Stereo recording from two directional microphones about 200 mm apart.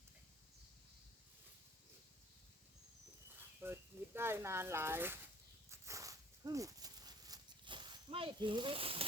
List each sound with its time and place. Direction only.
3.6 s speech: 10° right (ahead or behind)
5.7 s dog: 15° right (ahead or behind)